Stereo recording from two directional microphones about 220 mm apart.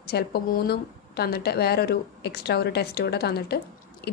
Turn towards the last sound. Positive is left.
turn(degrees=45)  # may be behind; listen again after turning